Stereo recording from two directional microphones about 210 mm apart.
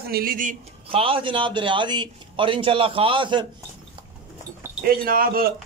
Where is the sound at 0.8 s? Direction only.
25° right (ahead or behind).